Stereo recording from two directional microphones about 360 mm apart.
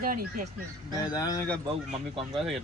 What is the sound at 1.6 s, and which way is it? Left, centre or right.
Speech, centre.